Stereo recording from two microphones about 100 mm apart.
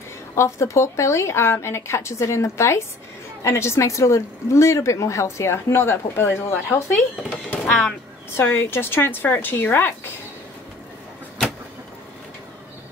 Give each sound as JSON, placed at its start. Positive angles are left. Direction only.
{"t": 0.4, "sound": "a woman's voice", "side_deg": 30}
{"t": 7.5, "sound": "speech", "side_deg": 10}
{"t": 8.4, "sound": "a woman's voice", "side_deg": 25}